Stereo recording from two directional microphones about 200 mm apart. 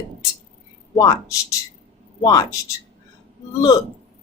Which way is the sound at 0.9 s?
20° left (ahead or behind).